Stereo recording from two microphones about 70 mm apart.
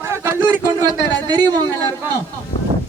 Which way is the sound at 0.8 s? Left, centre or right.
Right.